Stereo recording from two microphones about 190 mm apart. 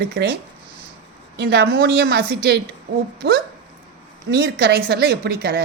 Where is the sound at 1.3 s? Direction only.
55° right (ahead or behind).